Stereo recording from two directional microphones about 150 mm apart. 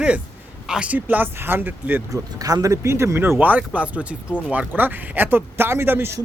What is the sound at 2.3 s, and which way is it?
Speech, 25° right (ahead or behind).